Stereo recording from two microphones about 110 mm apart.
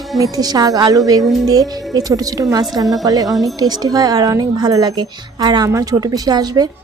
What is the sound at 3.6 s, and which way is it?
A woman's voice, 35° right (ahead or behind).